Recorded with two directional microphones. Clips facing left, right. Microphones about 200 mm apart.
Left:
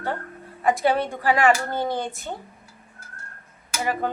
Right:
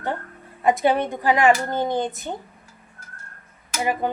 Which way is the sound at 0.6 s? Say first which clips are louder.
Right 2 dB; 20° right (ahead or behind).